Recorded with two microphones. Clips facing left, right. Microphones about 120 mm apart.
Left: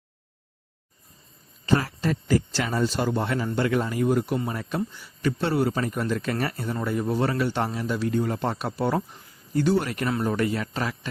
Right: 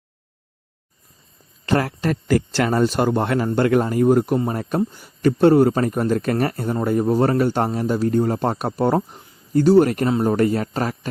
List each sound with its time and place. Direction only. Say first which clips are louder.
1.6 s speech: right 4 dB; 65° right (ahead or behind); by 9.0 s 45° right (ahead or behind)
9.1 s a sound: right 5 dB; 20° right (ahead or behind)
9.5 s speech: right 9 dB; 45° right (ahead or behind)